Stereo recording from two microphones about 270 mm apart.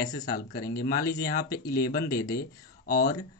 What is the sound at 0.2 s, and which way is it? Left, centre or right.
Speech, left.